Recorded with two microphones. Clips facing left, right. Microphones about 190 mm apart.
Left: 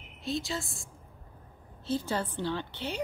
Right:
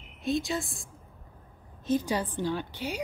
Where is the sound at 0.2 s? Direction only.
15° right (ahead or behind).